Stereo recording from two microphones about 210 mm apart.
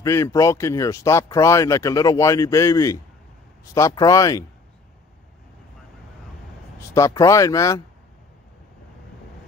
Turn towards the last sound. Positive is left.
turn(degrees=15)  # may be behind; listen again after turning